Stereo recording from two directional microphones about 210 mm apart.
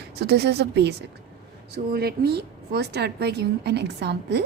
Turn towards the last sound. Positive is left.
turn(degrees=-55)  # may be behind; listen again after turning